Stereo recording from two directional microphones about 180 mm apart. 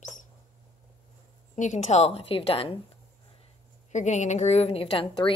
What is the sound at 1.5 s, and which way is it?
A woman's voice, 40° left (ahead or behind).